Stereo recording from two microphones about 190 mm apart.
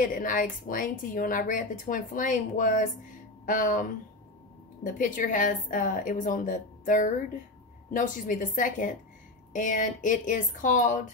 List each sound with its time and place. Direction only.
0.0 s speech: 45° left (ahead or behind)
4.8 s speech: 45° left (ahead or behind)